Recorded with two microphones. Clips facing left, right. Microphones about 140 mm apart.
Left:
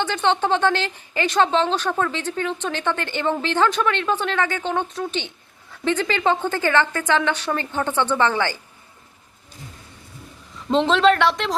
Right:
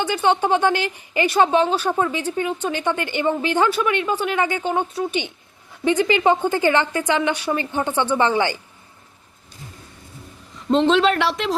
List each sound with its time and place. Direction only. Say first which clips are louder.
0.0 s a woman's voice: right 2 dB; 10° right (ahead or behind)
10.7 s speech: even; centre (ahead or behind)